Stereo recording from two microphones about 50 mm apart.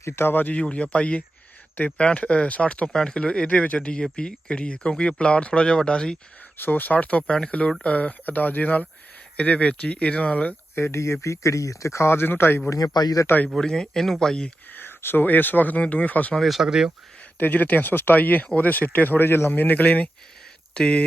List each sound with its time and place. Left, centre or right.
0.3 s speech: left
0.5 s speech: left
6.6 s speech: left
10.8 s speech: left
12.0 s speech: left
13.6 s speech: centre
14.7 s speech: left
16.5 s speech: centre
17.4 s speech: left
20.7 s speech: centre